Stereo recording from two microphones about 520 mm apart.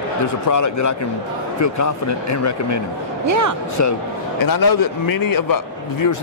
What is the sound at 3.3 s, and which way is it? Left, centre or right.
Speech, right.